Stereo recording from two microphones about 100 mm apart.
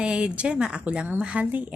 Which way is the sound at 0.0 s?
10° right (ahead or behind).